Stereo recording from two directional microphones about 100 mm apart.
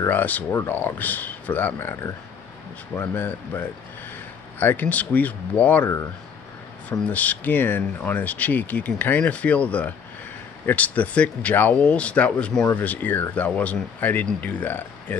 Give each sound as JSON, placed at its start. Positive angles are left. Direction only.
{"t": 0.1, "sound": "speech", "side_deg": 15}
{"t": 6.9, "sound": "speech", "side_deg": 15}